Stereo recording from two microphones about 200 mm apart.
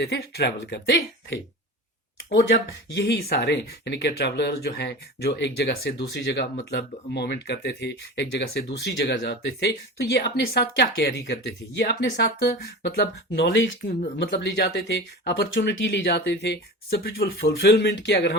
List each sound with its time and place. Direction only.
0.0 s speech: 55° left (ahead or behind)
2.9 s speech: 60° left (ahead or behind)